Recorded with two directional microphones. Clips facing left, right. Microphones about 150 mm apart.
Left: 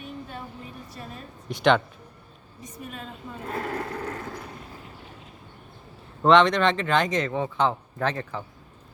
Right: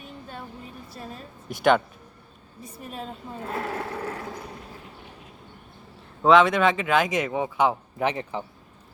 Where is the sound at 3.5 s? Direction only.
5° right (ahead or behind).